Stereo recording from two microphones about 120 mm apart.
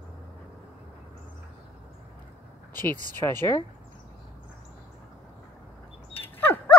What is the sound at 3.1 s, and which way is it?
Speech, 20° left (ahead or behind).